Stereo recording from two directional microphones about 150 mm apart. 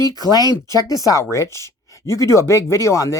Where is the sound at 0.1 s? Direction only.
25° left (ahead or behind).